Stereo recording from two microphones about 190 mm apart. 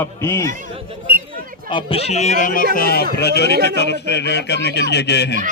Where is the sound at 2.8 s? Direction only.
55° left (ahead or behind).